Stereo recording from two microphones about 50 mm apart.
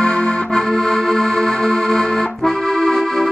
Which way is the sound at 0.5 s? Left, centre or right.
Centre.